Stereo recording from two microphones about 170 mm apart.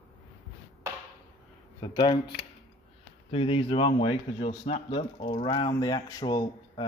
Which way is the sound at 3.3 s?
35° left (ahead or behind).